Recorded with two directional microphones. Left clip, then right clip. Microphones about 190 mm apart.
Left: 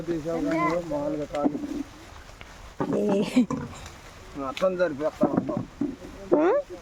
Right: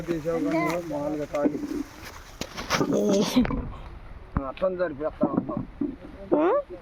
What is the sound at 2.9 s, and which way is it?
Speech, centre (ahead or behind).